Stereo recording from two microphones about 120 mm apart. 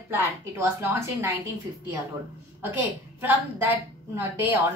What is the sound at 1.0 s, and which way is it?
Speech, 20° right (ahead or behind).